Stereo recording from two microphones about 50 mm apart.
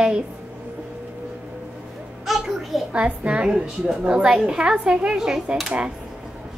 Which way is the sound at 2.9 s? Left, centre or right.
Right.